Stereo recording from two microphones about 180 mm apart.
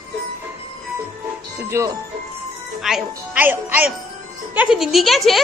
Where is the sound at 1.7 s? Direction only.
15° right (ahead or behind).